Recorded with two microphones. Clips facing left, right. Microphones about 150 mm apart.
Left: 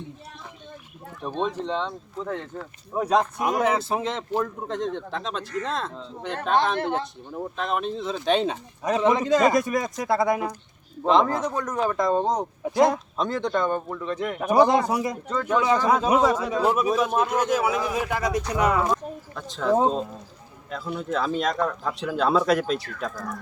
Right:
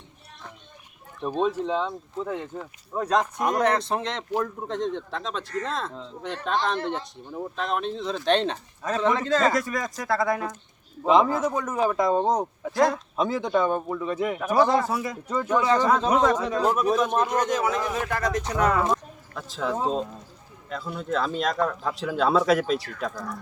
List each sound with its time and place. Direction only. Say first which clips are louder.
1.2 s speech: right 3 dB; 5° right (ahead or behind)
2.9 s speech: left 2 dB; 10° left (ahead or behind)
6.7 s speech: left 3 dB; 60° left (ahead or behind)
7.3 s speech: left 1 dB; centre (ahead or behind)
8.8 s speech: left 3 dB; 15° left (ahead or behind)
11.0 s speech: right 1 dB; 5° right (ahead or behind)
12.6 s speech: left 3 dB; 20° left (ahead or behind)
13.1 s speech: right 1 dB; 5° right (ahead or behind)
14.4 s speech: left 3 dB; 20° left (ahead or behind)
15.3 s speech: right 1 dB; 10° right (ahead or behind)
15.6 s speech: even; 10° left (ahead or behind)
18.9 s a sound: left 1 dB; centre (ahead or behind)
20.7 s speech: left 1 dB; centre (ahead or behind)